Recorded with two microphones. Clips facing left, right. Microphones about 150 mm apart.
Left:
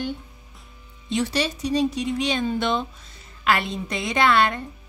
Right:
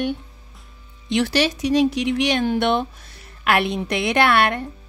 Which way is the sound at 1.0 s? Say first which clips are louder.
Right 4 dB; 85° right.